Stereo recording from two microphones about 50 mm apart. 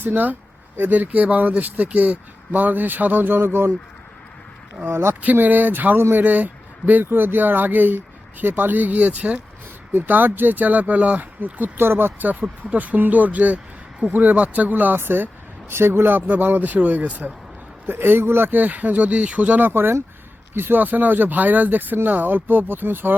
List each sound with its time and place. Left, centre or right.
0.0 s speech: right
4.9 s speech: right
5.2 s speech: right
6.0 s speech: right
6.2 s speech: right
7.0 s speech: right
11.8 s speech: right
12.3 s speech: right
17.8 s speech: right